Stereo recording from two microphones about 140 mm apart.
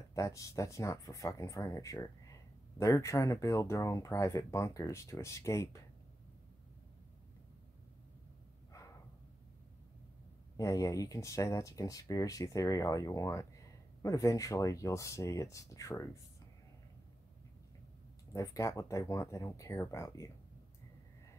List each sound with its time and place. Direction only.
0.1 s speech: 20° left (ahead or behind)
10.6 s speech: 25° left (ahead or behind)
18.3 s speech: 20° left (ahead or behind)